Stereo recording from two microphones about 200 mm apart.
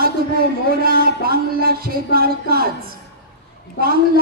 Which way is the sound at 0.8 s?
50° right (ahead or behind).